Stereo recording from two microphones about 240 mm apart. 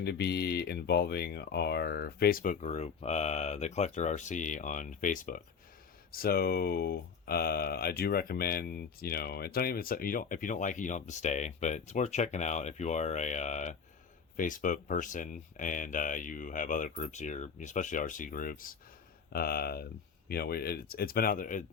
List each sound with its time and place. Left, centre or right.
0.0 s speech: left